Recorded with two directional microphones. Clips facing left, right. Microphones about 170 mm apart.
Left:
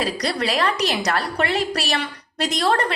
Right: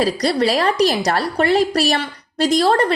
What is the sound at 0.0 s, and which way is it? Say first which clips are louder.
A woman's voice: right 6 dB; 35° right (ahead or behind).